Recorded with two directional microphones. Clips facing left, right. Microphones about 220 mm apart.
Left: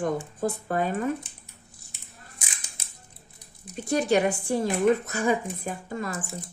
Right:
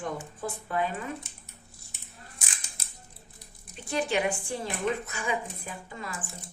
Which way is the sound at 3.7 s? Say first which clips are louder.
Left 6 dB; 45° left (ahead or behind).